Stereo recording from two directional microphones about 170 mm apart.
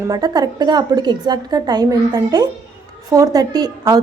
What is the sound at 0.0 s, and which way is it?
A woman's voice, 20° right (ahead or behind).